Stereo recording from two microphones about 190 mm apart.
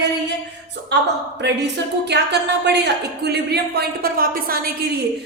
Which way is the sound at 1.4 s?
65° right (ahead or behind).